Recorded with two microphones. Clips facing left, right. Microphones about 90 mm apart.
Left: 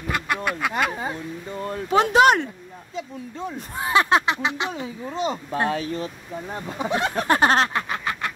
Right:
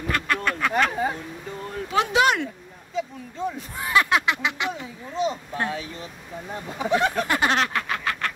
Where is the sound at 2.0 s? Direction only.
40° left (ahead or behind).